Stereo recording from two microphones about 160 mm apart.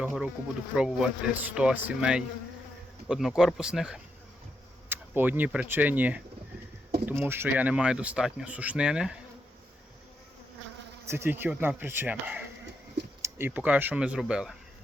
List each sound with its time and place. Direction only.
0.0 s speech: 5° right (ahead or behind)
11.0 s speech: 15° right (ahead or behind)